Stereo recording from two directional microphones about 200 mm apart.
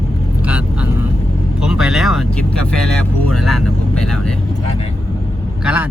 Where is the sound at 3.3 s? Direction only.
Centre (ahead or behind).